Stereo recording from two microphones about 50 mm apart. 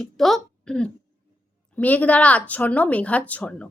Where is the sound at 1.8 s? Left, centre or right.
Left.